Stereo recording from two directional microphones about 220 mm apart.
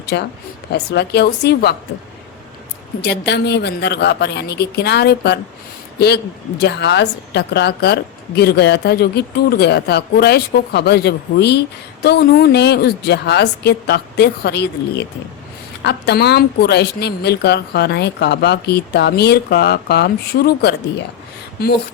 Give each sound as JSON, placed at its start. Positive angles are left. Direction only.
{"t": 0.0, "sound": "a woman's voice", "side_deg": 50}
{"t": 3.0, "sound": "a woman's voice", "side_deg": 50}
{"t": 6.6, "sound": "a woman's voice", "side_deg": 50}